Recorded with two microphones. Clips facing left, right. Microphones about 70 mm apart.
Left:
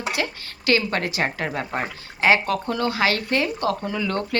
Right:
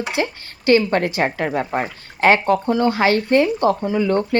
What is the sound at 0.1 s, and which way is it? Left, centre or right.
Speech, right.